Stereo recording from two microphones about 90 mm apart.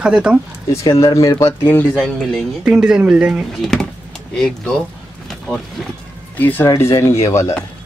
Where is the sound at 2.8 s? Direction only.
10° right (ahead or behind).